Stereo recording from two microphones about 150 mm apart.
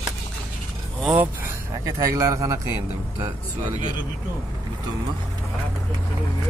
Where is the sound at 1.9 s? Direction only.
20° right (ahead or behind).